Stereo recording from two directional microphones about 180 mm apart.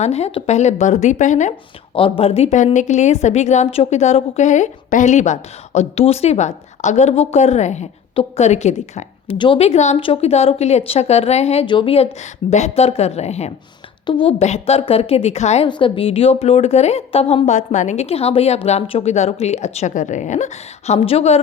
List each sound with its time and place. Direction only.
0.0 s a woman's voice: 35° left (ahead or behind)
2.0 s a woman's voice: 30° left (ahead or behind)
15.6 s a woman's voice: 25° left (ahead or behind)